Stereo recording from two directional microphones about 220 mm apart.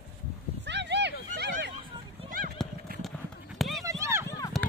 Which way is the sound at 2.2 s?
40° right (ahead or behind).